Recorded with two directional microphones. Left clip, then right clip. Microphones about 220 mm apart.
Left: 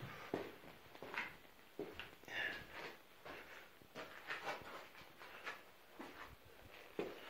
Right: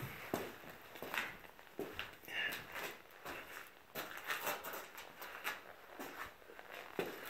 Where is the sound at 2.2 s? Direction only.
25° left (ahead or behind).